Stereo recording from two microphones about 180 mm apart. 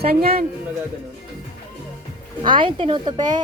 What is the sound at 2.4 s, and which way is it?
Speech, 25° right (ahead or behind).